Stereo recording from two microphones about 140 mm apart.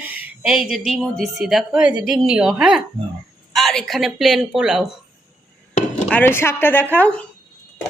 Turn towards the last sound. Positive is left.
turn(degrees=10)  # may be behind; listen again after turning